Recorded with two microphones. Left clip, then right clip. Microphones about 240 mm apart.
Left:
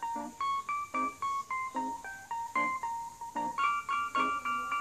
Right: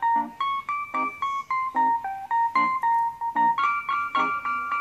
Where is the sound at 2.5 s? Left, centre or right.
Right.